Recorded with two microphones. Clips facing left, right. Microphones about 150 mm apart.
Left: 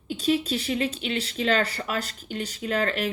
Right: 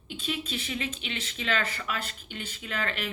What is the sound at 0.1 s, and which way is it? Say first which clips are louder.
Speech: left 10 dB; 40° left (ahead or behind).